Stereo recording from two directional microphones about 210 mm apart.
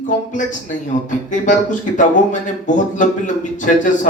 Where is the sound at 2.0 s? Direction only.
35° left (ahead or behind).